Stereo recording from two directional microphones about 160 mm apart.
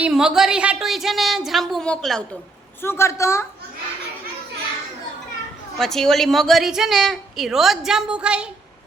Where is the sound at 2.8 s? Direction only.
15° left (ahead or behind).